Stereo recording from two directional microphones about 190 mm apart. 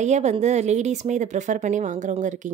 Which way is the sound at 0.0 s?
35° right (ahead or behind).